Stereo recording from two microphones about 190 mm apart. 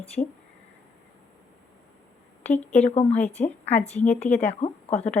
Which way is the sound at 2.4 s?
10° left (ahead or behind).